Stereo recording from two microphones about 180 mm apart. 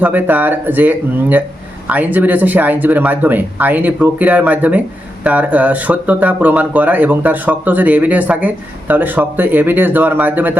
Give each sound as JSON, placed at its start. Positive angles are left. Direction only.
{"t": 0.0, "sound": "speech", "side_deg": -10}